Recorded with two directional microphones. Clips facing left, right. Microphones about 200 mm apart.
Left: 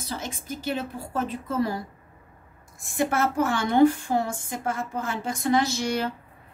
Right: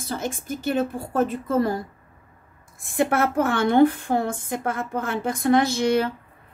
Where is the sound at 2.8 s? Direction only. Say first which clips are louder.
Right 3 dB; 55° right (ahead or behind).